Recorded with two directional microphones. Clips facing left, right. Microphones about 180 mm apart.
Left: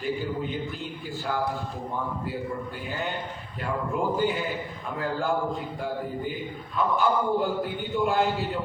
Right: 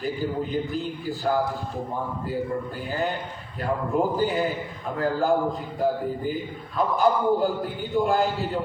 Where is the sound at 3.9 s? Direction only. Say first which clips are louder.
Right 5 dB; 40° right (ahead or behind).